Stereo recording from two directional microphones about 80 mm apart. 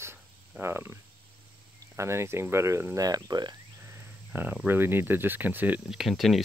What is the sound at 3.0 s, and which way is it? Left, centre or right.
Speech, right.